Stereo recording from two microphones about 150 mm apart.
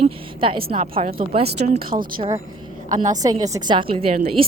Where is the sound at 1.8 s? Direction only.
70° right (ahead or behind).